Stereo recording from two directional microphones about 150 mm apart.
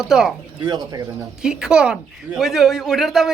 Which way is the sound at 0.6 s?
25° right (ahead or behind).